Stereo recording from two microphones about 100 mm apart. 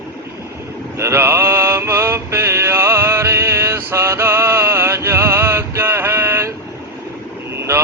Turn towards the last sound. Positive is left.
turn(degrees=-25)  # may be behind; listen again after turning